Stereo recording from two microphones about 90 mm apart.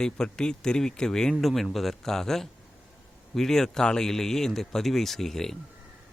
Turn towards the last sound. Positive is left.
turn(degrees=5)  # may be behind; listen again after turning